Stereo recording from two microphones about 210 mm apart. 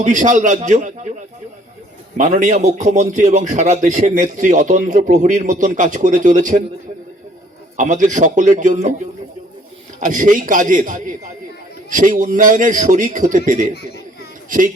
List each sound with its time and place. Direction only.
0.0 s a man's voice: 35° right (ahead or behind)
2.1 s a man's voice: 35° right (ahead or behind)
7.8 s a man's voice: 35° right (ahead or behind)
10.0 s a man's voice: 35° right (ahead or behind)